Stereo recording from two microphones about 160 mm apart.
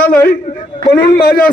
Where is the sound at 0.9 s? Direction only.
70° left (ahead or behind).